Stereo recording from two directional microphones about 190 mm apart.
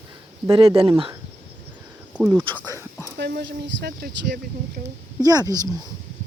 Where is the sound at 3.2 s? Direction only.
60° right (ahead or behind).